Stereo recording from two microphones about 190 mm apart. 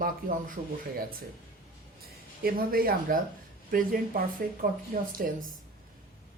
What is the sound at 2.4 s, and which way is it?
Speech, 50° right (ahead or behind).